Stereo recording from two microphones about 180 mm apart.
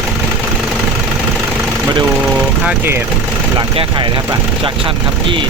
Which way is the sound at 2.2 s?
10° right (ahead or behind).